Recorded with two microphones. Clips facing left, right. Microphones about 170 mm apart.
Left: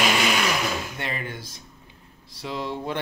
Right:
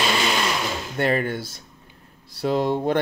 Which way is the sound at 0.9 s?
50° right (ahead or behind).